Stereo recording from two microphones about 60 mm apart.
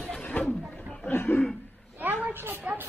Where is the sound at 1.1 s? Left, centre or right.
Left.